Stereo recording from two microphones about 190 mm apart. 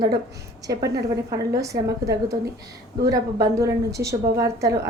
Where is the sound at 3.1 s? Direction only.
15° right (ahead or behind).